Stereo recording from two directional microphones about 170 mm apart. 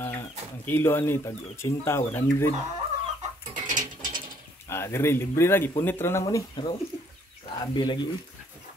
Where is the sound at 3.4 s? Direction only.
50° right (ahead or behind).